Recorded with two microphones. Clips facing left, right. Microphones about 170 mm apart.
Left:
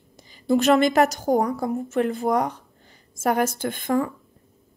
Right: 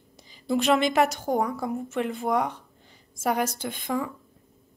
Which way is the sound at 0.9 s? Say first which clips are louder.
Left 4 dB; 40° left (ahead or behind).